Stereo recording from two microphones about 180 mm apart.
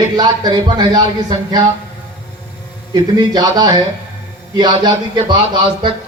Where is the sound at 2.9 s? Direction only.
25° right (ahead or behind).